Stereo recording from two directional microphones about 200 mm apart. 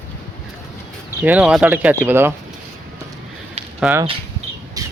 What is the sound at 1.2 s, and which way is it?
Speech, 5° right (ahead or behind).